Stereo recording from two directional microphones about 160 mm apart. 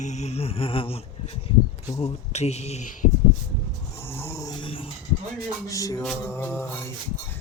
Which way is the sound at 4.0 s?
15° left (ahead or behind).